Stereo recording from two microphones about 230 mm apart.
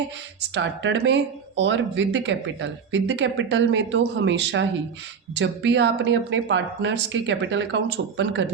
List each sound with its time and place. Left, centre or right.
0.5 s speech: right